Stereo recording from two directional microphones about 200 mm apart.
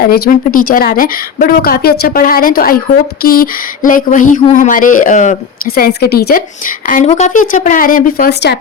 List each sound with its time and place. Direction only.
0.0 s speech: 45° left (ahead or behind)
6.8 s speech: 40° left (ahead or behind); by 8.5 s 55° left (ahead or behind)